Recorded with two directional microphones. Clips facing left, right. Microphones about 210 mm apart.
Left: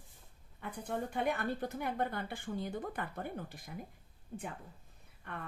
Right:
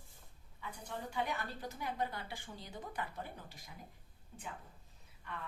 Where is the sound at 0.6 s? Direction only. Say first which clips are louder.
Left 7 dB; 55° left (ahead or behind).